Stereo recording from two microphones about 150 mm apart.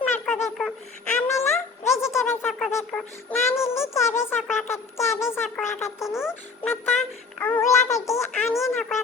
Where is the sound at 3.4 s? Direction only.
20° left (ahead or behind).